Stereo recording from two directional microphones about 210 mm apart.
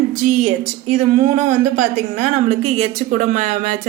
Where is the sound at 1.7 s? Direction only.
35° right (ahead or behind).